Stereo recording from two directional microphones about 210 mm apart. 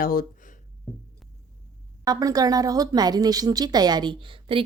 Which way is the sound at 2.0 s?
15° right (ahead or behind).